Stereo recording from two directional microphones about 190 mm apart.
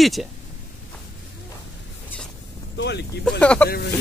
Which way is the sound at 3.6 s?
55° left (ahead or behind).